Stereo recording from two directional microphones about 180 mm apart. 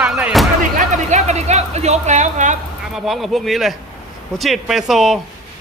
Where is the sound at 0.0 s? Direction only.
5° right (ahead or behind).